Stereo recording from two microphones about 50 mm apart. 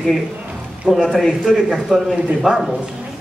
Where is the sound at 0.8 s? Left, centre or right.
Centre.